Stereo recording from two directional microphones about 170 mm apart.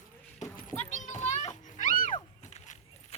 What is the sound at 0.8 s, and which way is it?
Children playing, 45° left (ahead or behind).